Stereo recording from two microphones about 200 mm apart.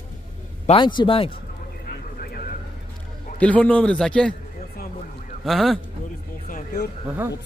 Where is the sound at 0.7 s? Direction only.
25° left (ahead or behind).